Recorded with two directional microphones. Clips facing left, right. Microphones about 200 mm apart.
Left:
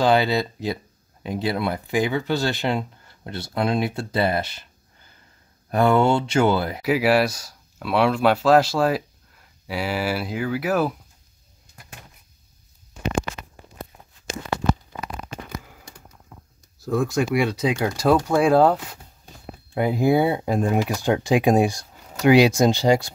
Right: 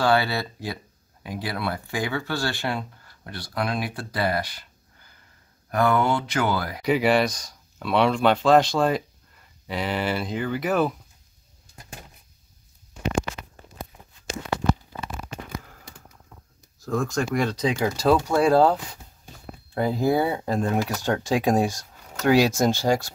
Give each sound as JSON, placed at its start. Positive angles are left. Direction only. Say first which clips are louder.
{"t": 0.0, "sound": "speech", "louder": "left 3 dB", "side_deg": 20}
{"t": 5.7, "sound": "speech", "louder": "left 4 dB", "side_deg": 25}
{"t": 6.8, "sound": "speech", "louder": "even", "side_deg": 5}
{"t": 16.8, "sound": "speech", "louder": "left 3 dB", "side_deg": 5}
{"t": 19.7, "sound": "speech", "louder": "left 3 dB", "side_deg": 10}